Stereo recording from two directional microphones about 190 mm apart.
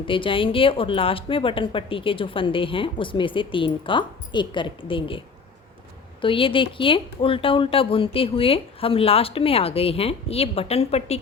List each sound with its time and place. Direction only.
0.0 s speech: 25° left (ahead or behind)
6.2 s speech: 25° left (ahead or behind)